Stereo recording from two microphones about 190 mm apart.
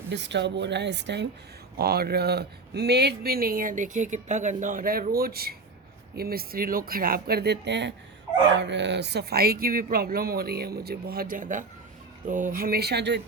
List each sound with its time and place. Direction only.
0.1 s a woman's voice: 65° right (ahead or behind)